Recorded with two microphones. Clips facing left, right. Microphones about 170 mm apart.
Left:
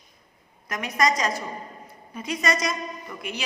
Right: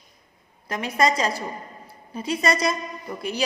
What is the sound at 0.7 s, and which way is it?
A woman's voice, 30° right (ahead or behind).